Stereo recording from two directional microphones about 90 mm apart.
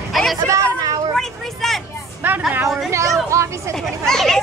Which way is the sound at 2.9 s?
35° right (ahead or behind).